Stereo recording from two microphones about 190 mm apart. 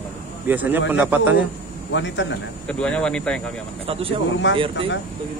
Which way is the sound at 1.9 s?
70° left (ahead or behind).